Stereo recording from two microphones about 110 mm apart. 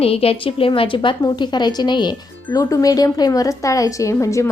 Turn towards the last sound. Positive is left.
turn(degrees=30)  # may be behind; listen again after turning